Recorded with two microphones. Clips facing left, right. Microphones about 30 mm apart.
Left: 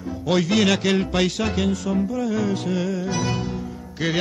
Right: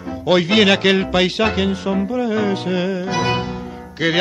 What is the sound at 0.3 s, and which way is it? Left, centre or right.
Speech, right.